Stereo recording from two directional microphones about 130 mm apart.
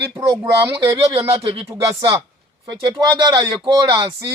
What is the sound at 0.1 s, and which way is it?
Speech, 30° right (ahead or behind).